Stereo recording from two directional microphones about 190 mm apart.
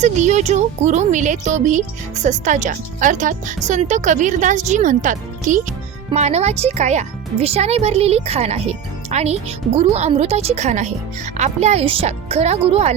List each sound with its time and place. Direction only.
0.0 s speech: 35° right (ahead or behind)